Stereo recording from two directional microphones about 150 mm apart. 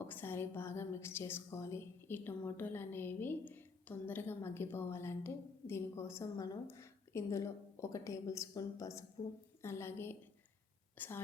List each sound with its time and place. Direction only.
0.0 s a woman's voice: 15° left (ahead or behind)